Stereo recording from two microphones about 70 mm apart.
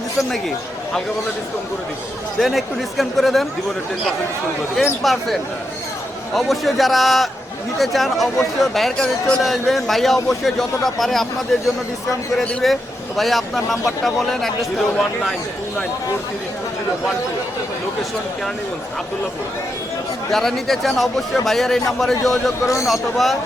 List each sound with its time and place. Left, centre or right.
0.2 s speech: centre
2.4 s speech: centre
5.0 s speech: centre
20.3 s speech: centre